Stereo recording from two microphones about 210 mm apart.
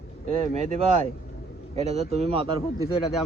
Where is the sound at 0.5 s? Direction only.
35° right (ahead or behind).